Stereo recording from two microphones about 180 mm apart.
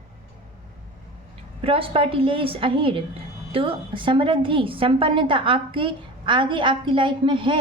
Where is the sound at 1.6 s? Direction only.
30° right (ahead or behind).